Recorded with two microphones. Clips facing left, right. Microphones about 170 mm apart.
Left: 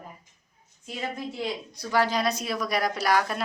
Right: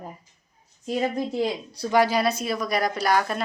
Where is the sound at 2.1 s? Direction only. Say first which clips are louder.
Right 3 dB; 5° right (ahead or behind).